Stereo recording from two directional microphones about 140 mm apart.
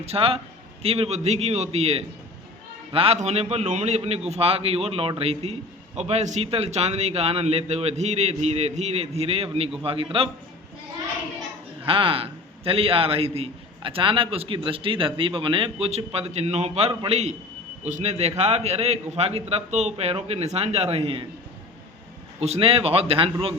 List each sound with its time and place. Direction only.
0.0 s a man's voice: 45° right (ahead or behind)
11.9 s a man's voice: 40° right (ahead or behind)
22.4 s a man's voice: 45° right (ahead or behind)